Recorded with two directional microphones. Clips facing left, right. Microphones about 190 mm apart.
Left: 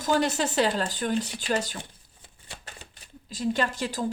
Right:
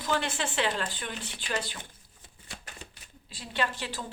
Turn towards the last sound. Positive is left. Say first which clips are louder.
# left 5 dB
turn(degrees=40)  # may be behind; listen again after turning